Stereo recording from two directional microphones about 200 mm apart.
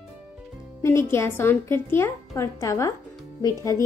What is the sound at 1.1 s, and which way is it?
A woman's voice, 10° left (ahead or behind).